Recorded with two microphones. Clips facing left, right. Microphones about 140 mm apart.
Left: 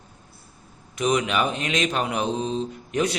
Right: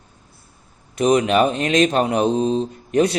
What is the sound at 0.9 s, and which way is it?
Speech, 40° right (ahead or behind).